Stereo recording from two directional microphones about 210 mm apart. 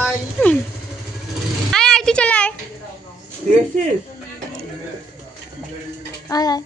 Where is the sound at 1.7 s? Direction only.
Centre (ahead or behind).